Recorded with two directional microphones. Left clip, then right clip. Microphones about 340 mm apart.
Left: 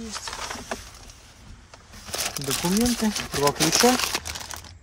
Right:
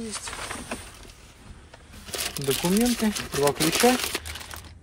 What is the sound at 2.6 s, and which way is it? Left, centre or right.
Speech, centre.